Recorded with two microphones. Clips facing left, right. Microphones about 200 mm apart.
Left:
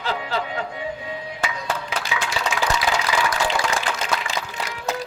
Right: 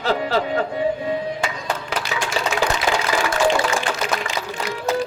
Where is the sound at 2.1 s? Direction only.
45° right (ahead or behind).